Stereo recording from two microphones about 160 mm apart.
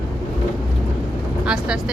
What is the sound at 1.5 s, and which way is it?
Vehicle, 5° right (ahead or behind).